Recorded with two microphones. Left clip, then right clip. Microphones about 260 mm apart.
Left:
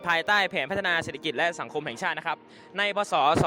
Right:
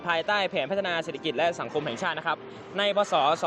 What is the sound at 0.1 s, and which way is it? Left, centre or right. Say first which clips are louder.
Speech: left 2 dB; left.